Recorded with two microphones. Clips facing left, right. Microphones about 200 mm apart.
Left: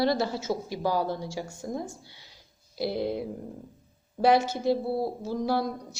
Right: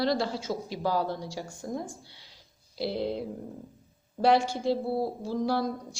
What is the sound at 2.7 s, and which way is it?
Speech, 50° left (ahead or behind).